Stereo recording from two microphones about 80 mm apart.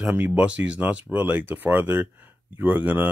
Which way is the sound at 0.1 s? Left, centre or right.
Centre.